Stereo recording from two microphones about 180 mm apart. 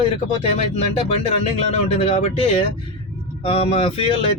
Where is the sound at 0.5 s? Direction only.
35° left (ahead or behind).